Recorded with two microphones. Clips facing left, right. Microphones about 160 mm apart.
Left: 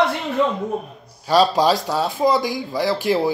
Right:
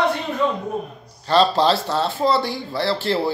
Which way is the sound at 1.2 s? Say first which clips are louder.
Left 1 dB; 10° left (ahead or behind).